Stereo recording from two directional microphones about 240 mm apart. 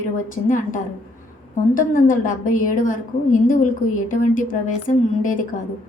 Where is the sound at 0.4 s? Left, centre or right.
Left.